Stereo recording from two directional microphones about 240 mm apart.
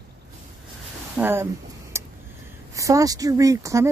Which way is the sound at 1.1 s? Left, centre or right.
Centre.